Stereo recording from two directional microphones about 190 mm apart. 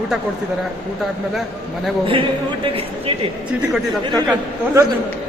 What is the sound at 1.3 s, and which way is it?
Speech, centre (ahead or behind).